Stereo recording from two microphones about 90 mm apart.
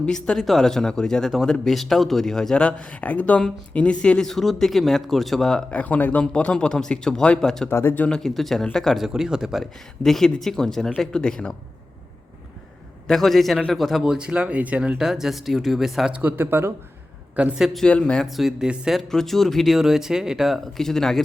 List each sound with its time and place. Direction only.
0.0 s speech: 10° left (ahead or behind)
7.7 s speech: 25° left (ahead or behind)
8.0 s speech: 5° left (ahead or behind)
13.1 s speech: centre (ahead or behind)
16.1 s speech: 20° right (ahead or behind)
17.3 s a woman's voice: 15° right (ahead or behind)
17.7 s speech: 10° left (ahead or behind)